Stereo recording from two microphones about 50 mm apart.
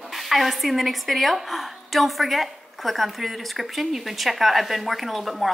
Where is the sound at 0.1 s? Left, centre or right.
Centre.